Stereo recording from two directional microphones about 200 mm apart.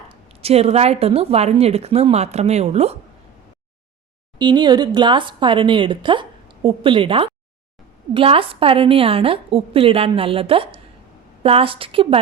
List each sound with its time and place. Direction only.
0.1 s speech: 30° right (ahead or behind)
4.4 s a woman's voice: 20° right (ahead or behind)